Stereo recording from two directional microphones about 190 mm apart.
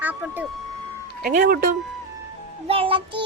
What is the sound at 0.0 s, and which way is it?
Music, 10° right (ahead or behind).